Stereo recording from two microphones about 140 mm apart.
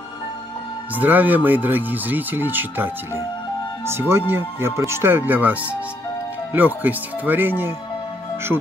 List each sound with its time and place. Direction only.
0.9 s speech: 10° right (ahead or behind)
4.1 s speech: 15° right (ahead or behind)